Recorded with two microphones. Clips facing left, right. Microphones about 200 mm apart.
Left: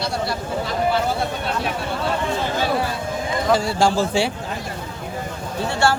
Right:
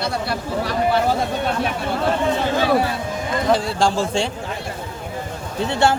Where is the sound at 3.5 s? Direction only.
Centre (ahead or behind).